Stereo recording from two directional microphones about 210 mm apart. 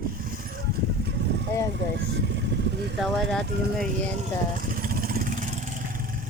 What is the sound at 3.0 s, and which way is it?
Speech, centre (ahead or behind).